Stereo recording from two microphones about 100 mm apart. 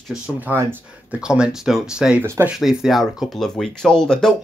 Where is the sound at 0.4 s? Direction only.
20° right (ahead or behind).